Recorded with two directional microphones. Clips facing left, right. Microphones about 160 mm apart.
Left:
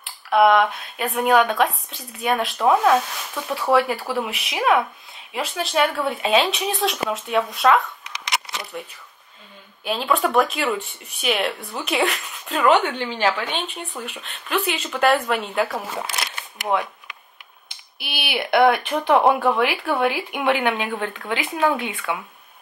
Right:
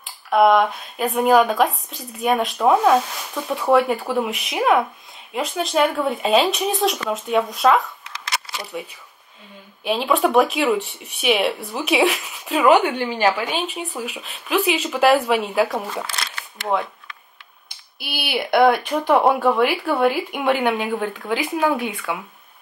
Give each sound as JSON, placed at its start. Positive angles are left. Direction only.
{"t": 0.0, "sound": "speech", "side_deg": 0}
{"t": 8.0, "sound": "a sound", "side_deg": 20}
{"t": 8.8, "sound": "speech", "side_deg": -5}
{"t": 16.0, "sound": "camera", "side_deg": 20}
{"t": 17.6, "sound": "a sound", "side_deg": 20}
{"t": 18.3, "sound": "speech", "side_deg": -15}
{"t": 20.1, "sound": "speech", "side_deg": 20}
{"t": 20.4, "sound": "speech", "side_deg": -15}